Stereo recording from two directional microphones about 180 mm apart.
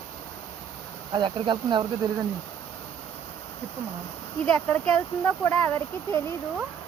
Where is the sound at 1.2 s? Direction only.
25° right (ahead or behind).